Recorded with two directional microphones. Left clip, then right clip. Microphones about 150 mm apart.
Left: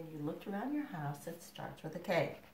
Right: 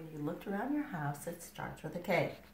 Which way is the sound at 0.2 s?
10° right (ahead or behind).